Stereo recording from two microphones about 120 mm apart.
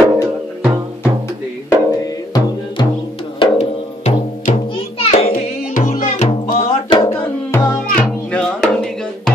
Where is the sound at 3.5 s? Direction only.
70° left (ahead or behind).